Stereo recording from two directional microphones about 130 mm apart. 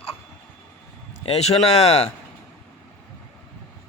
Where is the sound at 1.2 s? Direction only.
50° left (ahead or behind).